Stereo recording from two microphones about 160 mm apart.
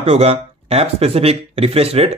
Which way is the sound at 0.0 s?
40° right (ahead or behind).